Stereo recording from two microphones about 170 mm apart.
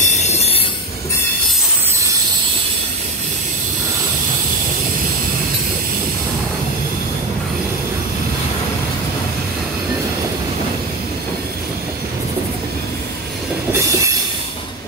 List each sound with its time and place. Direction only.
0.0 s train: 45° left (ahead or behind)